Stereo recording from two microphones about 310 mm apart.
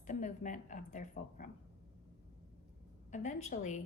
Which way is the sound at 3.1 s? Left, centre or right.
Left.